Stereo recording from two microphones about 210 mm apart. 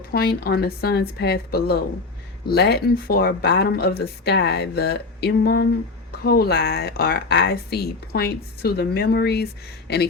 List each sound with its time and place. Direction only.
0.1 s speech: 50° left (ahead or behind)